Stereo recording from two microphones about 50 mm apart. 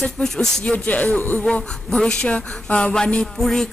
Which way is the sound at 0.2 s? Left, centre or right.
Centre.